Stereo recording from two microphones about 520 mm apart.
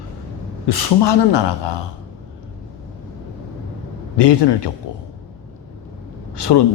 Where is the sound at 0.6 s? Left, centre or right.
Left.